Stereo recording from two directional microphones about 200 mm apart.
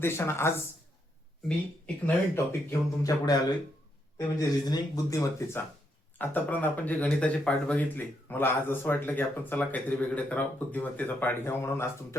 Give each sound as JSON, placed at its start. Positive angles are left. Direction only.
{"t": 0.0, "sound": "speech", "side_deg": 15}
{"t": 2.0, "sound": "speech", "side_deg": 10}
{"t": 4.4, "sound": "speech", "side_deg": 20}